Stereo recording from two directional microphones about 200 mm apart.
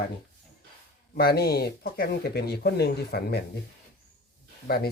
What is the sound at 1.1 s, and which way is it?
Speech, 50° left (ahead or behind).